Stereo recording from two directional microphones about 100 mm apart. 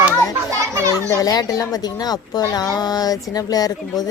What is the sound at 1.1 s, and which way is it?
Speech, 40° left (ahead or behind).